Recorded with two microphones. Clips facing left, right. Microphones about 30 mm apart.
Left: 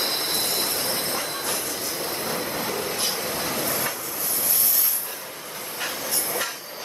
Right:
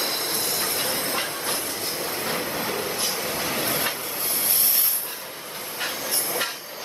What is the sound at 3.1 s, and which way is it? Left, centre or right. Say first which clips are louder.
Vehicle: even; centre.